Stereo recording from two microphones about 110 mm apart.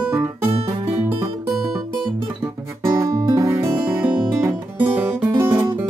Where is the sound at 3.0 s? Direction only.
30° right (ahead or behind).